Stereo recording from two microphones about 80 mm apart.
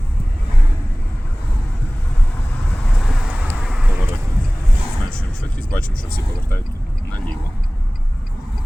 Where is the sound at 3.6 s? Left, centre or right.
Centre.